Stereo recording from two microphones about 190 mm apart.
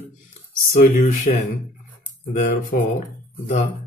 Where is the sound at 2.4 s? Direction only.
45° left (ahead or behind).